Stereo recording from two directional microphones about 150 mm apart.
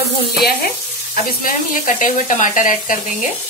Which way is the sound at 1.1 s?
60° left (ahead or behind).